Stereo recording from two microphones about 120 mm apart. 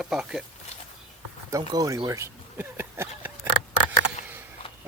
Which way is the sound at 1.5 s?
30° right (ahead or behind).